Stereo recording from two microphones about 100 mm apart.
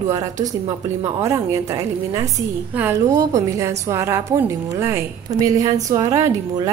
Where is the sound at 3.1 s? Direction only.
35° right (ahead or behind).